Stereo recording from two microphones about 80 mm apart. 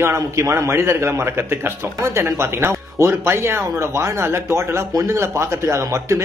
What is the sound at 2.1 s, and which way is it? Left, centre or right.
Speech, right.